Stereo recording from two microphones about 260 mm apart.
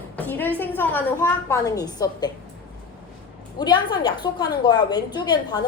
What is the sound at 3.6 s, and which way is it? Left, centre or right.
A woman's voice, centre.